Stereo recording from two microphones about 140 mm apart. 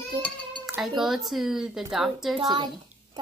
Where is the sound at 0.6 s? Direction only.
5° right (ahead or behind).